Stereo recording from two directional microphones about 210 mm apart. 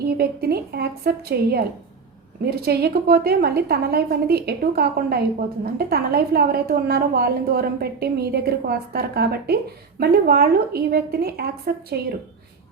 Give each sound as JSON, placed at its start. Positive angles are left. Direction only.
{"t": 0.0, "sound": "a woman's voice", "side_deg": -50}